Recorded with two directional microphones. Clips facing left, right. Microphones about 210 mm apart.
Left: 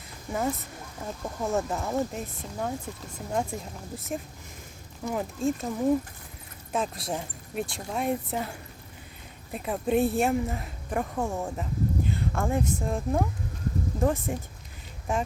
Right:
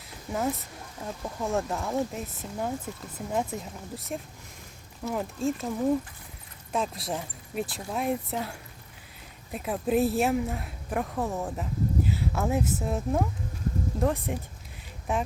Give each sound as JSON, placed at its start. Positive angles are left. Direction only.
{"t": 0.3, "sound": "speech", "side_deg": -5}
{"t": 6.7, "sound": "speech", "side_deg": 0}